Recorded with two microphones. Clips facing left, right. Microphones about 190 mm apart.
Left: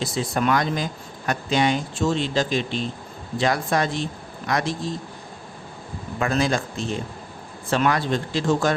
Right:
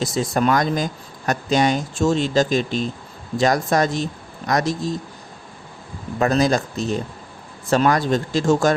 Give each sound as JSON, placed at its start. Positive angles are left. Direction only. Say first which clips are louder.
{"t": 0.0, "sound": "speech", "louder": "right 3 dB", "side_deg": -45}
{"t": 6.1, "sound": "speech", "louder": "right 4 dB", "side_deg": -40}